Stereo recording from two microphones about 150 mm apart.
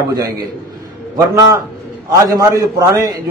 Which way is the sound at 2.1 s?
20° right (ahead or behind).